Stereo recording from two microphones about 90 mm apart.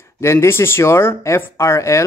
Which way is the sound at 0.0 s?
30° left (ahead or behind).